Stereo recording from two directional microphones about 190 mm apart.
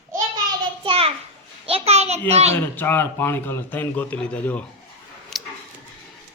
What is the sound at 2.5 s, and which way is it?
A man's voice, 10° left (ahead or behind).